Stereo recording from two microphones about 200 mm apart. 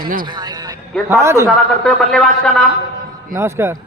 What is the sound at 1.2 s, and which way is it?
Speech, 15° right (ahead or behind).